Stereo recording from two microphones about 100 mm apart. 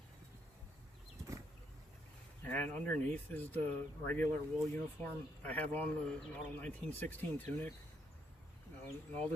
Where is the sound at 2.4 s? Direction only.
15° left (ahead or behind).